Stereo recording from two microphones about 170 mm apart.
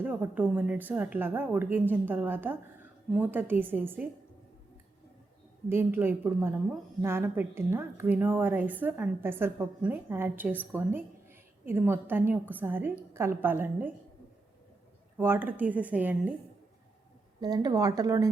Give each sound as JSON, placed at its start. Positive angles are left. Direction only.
{"t": 0.0, "sound": "speech", "side_deg": -10}
{"t": 5.6, "sound": "speech", "side_deg": -15}
{"t": 15.2, "sound": "speech", "side_deg": -10}
{"t": 17.4, "sound": "speech", "side_deg": -20}